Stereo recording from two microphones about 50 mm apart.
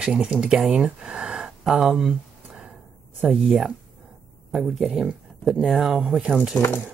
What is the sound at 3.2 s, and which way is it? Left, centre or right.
Speech, centre.